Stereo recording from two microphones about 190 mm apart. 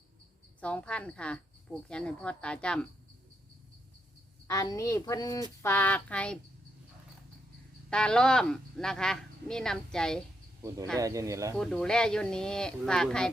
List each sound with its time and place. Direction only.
0.6 s speech: 5° left (ahead or behind)
4.4 s a woman's voice: 15° left (ahead or behind)
7.9 s speech: 5° left (ahead or behind)
10.9 s speech: 15° right (ahead or behind)
11.5 s speech: 5° left (ahead or behind)